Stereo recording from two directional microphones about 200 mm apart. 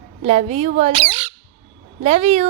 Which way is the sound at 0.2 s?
30° right (ahead or behind).